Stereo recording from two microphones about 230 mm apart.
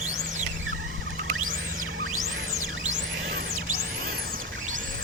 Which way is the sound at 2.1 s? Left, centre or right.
Right.